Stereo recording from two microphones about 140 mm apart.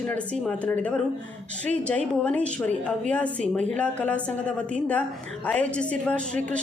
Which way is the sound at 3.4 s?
55° right (ahead or behind).